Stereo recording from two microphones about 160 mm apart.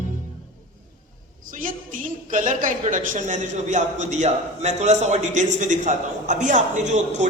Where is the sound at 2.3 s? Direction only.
55° right (ahead or behind).